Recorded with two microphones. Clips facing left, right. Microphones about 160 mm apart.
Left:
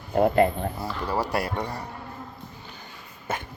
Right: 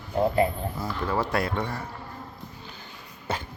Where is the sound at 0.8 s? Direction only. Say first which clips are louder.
Right 2 dB; 10° left (ahead or behind).